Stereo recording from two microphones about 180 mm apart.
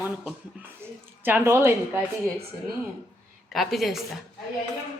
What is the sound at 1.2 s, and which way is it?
Speech, 10° right (ahead or behind).